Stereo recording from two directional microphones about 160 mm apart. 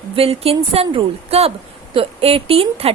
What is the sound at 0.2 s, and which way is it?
A woman's voice, 40° right (ahead or behind).